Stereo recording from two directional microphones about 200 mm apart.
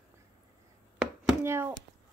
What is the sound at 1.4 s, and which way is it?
Speech, 10° right (ahead or behind).